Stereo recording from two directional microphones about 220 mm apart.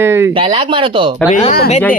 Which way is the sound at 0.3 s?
25° right (ahead or behind).